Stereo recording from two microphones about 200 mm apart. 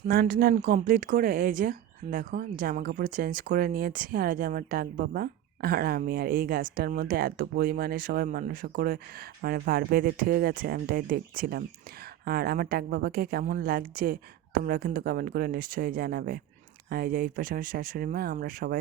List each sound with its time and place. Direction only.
0.1 s speech: 45° right (ahead or behind)